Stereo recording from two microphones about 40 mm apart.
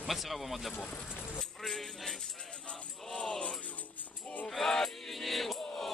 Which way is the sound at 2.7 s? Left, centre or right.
Left.